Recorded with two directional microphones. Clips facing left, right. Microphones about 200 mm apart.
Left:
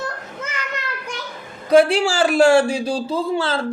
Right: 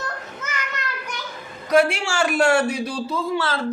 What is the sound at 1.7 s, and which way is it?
A man's voice, 30° left (ahead or behind).